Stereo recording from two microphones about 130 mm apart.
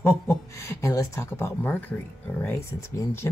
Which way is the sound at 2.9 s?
20° left (ahead or behind).